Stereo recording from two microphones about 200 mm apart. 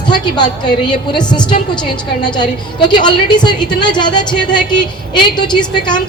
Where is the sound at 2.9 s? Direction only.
20° left (ahead or behind).